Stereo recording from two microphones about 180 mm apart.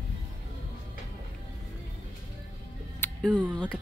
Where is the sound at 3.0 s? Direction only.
10° left (ahead or behind).